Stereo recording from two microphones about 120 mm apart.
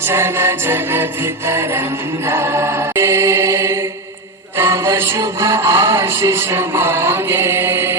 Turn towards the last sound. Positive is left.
turn(degrees=-20)  # may be behind; listen again after turning